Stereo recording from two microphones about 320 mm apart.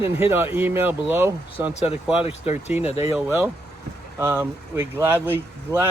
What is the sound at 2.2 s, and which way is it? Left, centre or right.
Speech, centre.